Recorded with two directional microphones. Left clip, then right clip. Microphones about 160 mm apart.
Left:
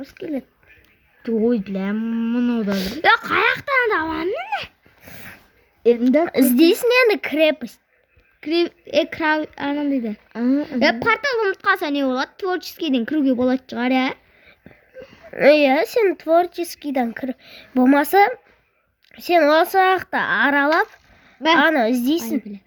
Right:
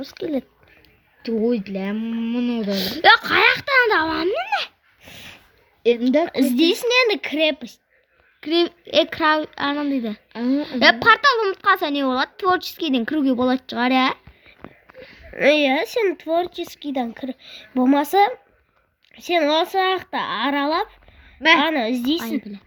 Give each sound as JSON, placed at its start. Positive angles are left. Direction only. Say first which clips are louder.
{"t": 0.0, "sound": "speech", "louder": "right 3 dB", "side_deg": -15}
{"t": 1.3, "sound": "speech", "louder": "left 2 dB", "side_deg": 30}
{"t": 2.6, "sound": "a woman's voice", "louder": "right 3 dB", "side_deg": 0}
{"t": 5.0, "sound": "a sound", "louder": "even", "side_deg": 45}
{"t": 5.8, "sound": "speech", "louder": "left 2 dB", "side_deg": 40}
{"t": 8.4, "sound": "a woman's voice", "louder": "right 1 dB", "side_deg": -5}
{"t": 10.3, "sound": "a woman's voice", "louder": "left 2 dB", "side_deg": 40}
{"t": 10.6, "sound": "a woman's voice", "louder": "right 6 dB", "side_deg": -5}
{"t": 14.9, "sound": "speech", "louder": "left 3 dB", "side_deg": 40}
{"t": 21.4, "sound": "speech", "louder": "left 1 dB", "side_deg": 40}